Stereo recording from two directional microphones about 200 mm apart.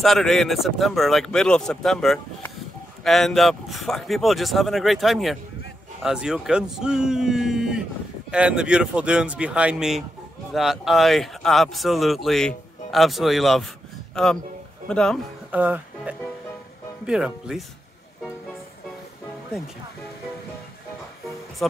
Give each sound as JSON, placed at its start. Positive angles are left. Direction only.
{"t": 0.0, "sound": "speech", "side_deg": 0}
{"t": 15.5, "sound": "speech", "side_deg": -5}